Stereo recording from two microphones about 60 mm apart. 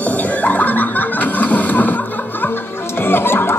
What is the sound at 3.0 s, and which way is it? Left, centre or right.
Music, left.